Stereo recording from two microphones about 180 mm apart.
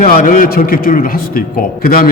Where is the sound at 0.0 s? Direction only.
50° left (ahead or behind).